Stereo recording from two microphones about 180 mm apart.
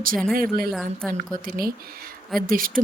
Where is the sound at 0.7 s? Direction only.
Centre (ahead or behind).